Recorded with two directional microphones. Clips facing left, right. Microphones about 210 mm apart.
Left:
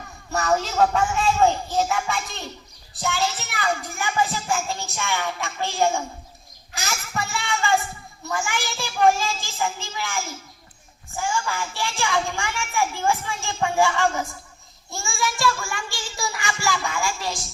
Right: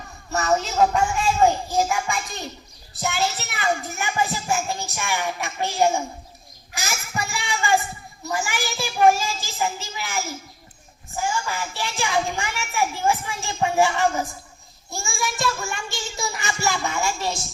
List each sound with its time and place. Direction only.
0.3 s speech: 5° right (ahead or behind)
3.0 s a child's voice: 20° right (ahead or behind)
7.1 s a child's voice: 15° right (ahead or behind)
14.9 s child singing: 20° right (ahead or behind)